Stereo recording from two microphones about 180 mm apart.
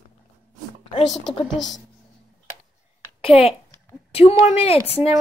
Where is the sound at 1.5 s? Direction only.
Centre (ahead or behind).